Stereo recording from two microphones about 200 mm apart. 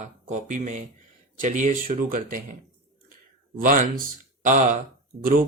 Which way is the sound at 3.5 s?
45° right (ahead or behind).